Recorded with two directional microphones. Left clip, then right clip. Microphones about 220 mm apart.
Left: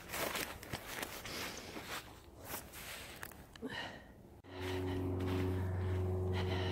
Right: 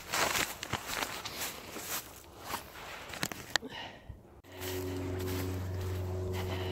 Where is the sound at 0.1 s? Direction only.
40° right (ahead or behind).